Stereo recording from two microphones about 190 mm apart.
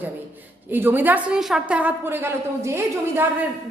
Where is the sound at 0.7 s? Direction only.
10° right (ahead or behind).